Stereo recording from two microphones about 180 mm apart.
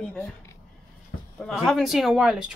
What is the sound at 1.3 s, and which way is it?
Speech, centre (ahead or behind).